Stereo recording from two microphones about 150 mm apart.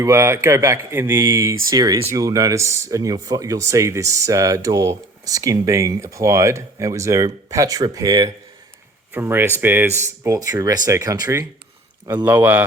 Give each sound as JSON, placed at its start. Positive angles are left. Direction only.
{"t": 0.0, "sound": "speech", "side_deg": -20}